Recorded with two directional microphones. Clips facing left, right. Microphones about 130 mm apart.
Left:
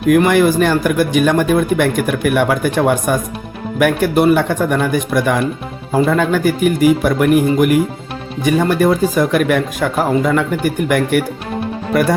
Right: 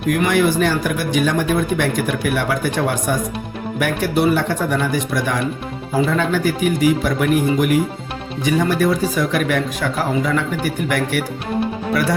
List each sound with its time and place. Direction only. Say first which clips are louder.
0.1 s speech: left 5 dB; 55° left (ahead or behind)